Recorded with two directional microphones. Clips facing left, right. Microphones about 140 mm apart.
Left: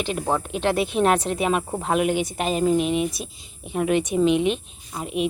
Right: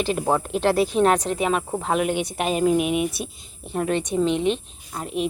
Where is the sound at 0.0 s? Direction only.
5° right (ahead or behind).